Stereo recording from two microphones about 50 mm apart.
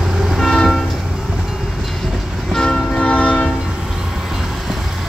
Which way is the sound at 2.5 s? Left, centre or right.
Centre.